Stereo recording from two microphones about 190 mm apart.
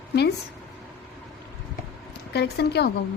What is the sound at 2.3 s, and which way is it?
Speech, 60° left (ahead or behind).